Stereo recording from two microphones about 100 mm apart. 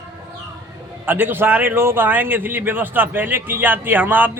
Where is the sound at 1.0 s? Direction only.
20° right (ahead or behind).